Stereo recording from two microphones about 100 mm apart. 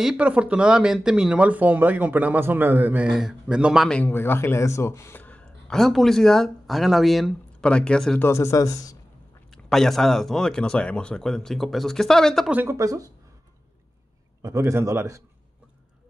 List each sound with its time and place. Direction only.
0.0 s speech: 10° right (ahead or behind)
3.1 s speech: 5° right (ahead or behind)
4.0 s a man's voice: 20° left (ahead or behind); by 7.3 s centre (ahead or behind)
7.6 s a man's voice: 10° left (ahead or behind)
8.2 s speech: 25° left (ahead or behind)
9.5 s speech: 5° left (ahead or behind)
12.6 s speech: 30° right (ahead or behind)
14.4 s a man's voice: 30° right (ahead or behind)